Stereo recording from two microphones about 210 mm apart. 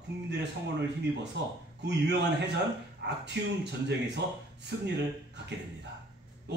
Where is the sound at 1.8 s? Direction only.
55° right (ahead or behind).